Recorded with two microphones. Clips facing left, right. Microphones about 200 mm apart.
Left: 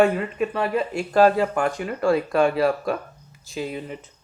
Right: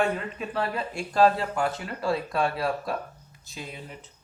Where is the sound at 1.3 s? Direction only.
55° left (ahead or behind).